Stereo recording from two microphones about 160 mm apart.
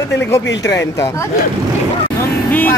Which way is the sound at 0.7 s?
20° left (ahead or behind).